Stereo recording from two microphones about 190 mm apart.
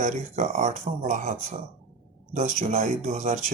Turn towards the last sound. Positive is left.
turn(degrees=-40)  # may be behind; listen again after turning